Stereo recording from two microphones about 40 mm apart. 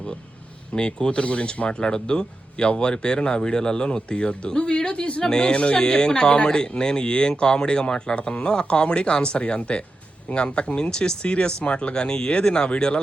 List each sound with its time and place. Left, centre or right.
0.7 s speech: left